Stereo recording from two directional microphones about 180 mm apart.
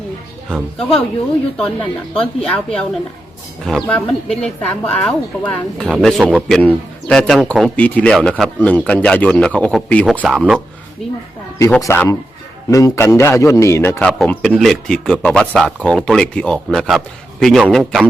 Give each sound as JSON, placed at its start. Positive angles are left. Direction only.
{"t": 1.5, "sound": "a man's voice", "side_deg": 5}
{"t": 11.6, "sound": "a man's voice", "side_deg": 15}
{"t": 14.1, "sound": "a man's voice", "side_deg": 5}